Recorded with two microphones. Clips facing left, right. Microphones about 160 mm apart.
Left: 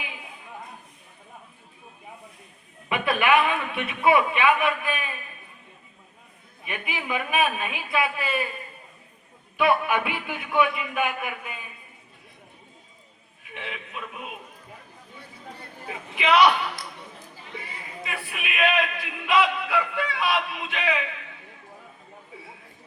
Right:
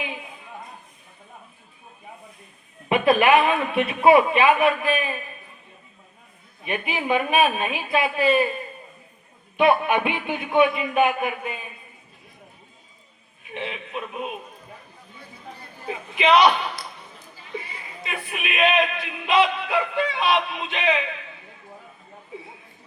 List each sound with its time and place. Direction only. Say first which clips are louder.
2.9 s a man's voice: right 5 dB; 25° right (ahead or behind)
6.7 s a man's voice: right 7 dB; 25° right (ahead or behind)
9.6 s a man's voice: right 3 dB; 25° right (ahead or behind)
13.5 s a man's voice: right 6 dB; 25° right (ahead or behind)
16.2 s a man's voice: right 2 dB; 20° right (ahead or behind)
18.0 s a man's voice: right 3 dB; 20° right (ahead or behind)